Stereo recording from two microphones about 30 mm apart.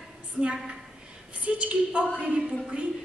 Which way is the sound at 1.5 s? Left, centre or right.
Right.